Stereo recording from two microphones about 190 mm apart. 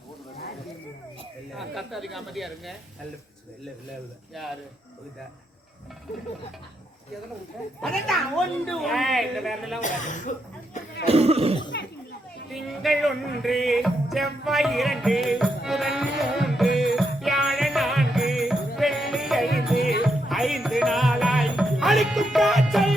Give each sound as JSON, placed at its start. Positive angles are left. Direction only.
{"t": 1.5, "sound": "a woman's voice", "side_deg": 0}
{"t": 7.8, "sound": "a woman's voice", "side_deg": 0}
{"t": 9.8, "sound": "speech", "side_deg": 40}
{"t": 11.0, "sound": "cough", "side_deg": -35}
{"t": 11.7, "sound": "a child's voice", "side_deg": 65}
{"t": 12.6, "sound": "music", "side_deg": 0}